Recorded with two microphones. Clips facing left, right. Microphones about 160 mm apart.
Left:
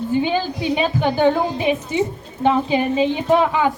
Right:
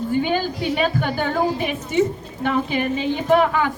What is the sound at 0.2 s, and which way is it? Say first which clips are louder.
A woman's voice: left 1 dB; 20° left (ahead or behind).